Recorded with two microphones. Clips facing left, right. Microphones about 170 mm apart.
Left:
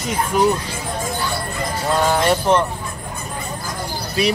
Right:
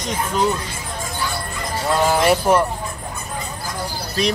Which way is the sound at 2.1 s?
5° right (ahead or behind).